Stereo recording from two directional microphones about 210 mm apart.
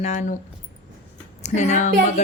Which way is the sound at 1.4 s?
35° left (ahead or behind).